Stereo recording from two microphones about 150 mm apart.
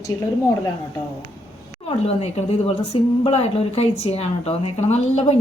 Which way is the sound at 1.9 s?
45° left (ahead or behind).